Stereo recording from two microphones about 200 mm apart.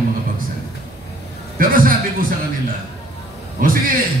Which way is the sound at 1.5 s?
45° right (ahead or behind).